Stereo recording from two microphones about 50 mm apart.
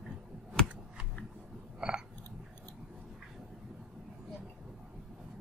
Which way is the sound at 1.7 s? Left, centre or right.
Centre.